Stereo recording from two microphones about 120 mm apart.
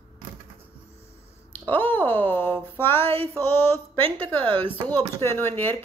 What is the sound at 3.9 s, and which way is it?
Speech, 50° right (ahead or behind).